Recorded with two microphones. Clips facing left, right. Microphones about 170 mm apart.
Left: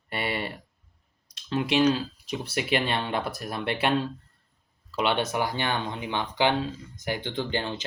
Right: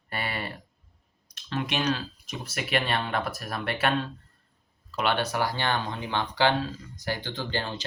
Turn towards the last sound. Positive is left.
turn(degrees=20)  # may be behind; listen again after turning